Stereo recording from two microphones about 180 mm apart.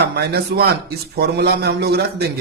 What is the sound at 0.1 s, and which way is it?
A man's voice, 60° right (ahead or behind).